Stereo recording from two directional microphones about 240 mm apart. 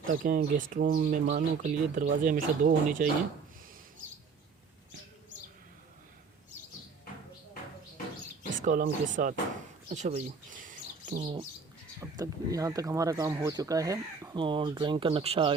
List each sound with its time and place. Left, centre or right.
0.0 s speech: right
8.5 s speech: right
9.9 s bird: right
11.2 s speech: right